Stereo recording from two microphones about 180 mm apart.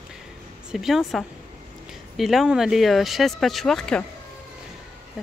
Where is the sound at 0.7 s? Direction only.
Centre (ahead or behind).